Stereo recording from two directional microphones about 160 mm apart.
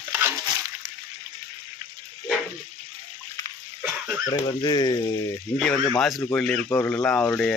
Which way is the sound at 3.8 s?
15° right (ahead or behind).